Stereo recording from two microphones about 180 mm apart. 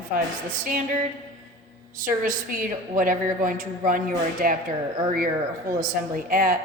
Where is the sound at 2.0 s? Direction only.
50° right (ahead or behind).